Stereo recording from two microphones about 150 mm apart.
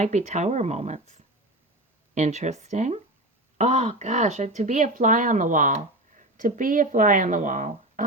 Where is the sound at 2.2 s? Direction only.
50° right (ahead or behind).